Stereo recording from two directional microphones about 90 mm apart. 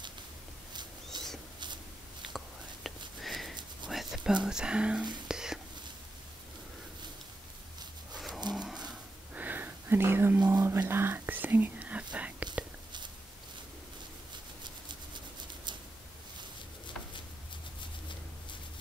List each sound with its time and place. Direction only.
1.1 s rodents: 55° right (ahead or behind)
2.3 s whispering: centre (ahead or behind)
3.9 s speech: centre (ahead or behind)
5.3 s whispering: 5° right (ahead or behind)
8.5 s a sound: 50° right (ahead or behind)
9.3 s whispering: 20° right (ahead or behind)
14.9 s a sound: 55° right (ahead or behind)